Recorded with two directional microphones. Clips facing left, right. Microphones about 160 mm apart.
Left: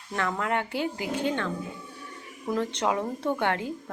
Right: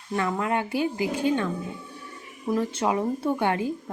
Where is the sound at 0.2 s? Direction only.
10° right (ahead or behind).